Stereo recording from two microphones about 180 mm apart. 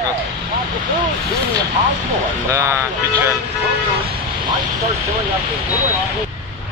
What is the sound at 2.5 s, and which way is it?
Speech, 15° right (ahead or behind).